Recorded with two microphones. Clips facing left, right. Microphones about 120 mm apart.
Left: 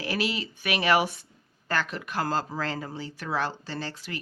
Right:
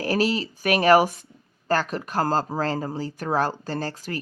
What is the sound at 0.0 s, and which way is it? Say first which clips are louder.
Speech: right 7 dB; 40° right (ahead or behind).